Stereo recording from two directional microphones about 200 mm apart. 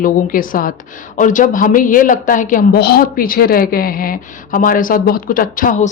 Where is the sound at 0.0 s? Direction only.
45° left (ahead or behind).